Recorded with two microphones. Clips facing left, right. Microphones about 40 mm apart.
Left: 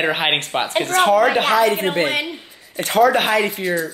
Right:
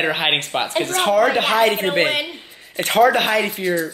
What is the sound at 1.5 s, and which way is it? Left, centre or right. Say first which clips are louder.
Speech: left 1 dB; right.